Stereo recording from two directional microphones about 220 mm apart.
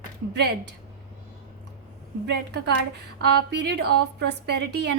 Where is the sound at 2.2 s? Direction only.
50° right (ahead or behind).